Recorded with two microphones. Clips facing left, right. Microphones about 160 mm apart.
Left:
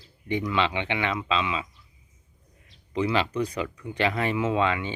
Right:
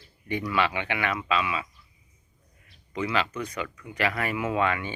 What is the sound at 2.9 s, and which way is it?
Speech, 30° left (ahead or behind).